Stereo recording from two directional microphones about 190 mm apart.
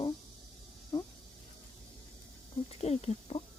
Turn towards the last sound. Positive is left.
turn(degrees=30)  # may be behind; listen again after turning